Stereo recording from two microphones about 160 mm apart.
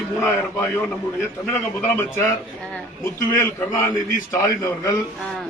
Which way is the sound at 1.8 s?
15° left (ahead or behind).